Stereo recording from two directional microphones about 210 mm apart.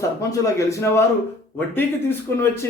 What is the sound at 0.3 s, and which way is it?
A man's voice, 15° left (ahead or behind).